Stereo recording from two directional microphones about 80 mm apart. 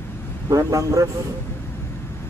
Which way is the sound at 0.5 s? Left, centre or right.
Right.